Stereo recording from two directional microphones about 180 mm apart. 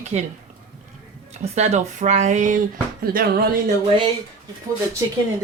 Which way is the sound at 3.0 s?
55° right (ahead or behind).